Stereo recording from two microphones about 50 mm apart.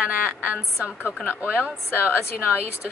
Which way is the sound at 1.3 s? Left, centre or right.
Right.